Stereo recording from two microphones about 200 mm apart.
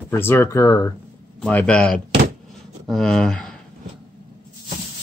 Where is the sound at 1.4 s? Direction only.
5° left (ahead or behind).